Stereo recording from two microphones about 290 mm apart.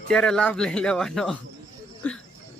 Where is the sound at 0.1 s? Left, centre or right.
Centre.